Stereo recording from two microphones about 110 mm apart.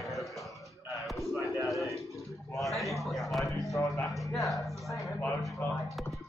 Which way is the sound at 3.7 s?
25° left (ahead or behind).